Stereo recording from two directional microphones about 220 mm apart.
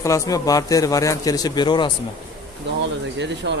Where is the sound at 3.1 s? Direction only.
55° right (ahead or behind).